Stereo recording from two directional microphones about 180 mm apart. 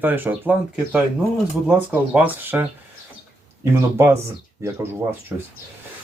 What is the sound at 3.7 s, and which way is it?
Speech, 15° right (ahead or behind).